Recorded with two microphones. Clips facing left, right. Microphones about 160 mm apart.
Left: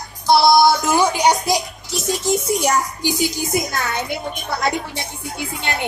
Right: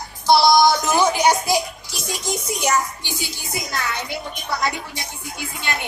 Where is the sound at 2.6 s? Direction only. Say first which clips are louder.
Left 2 dB; 30° left (ahead or behind).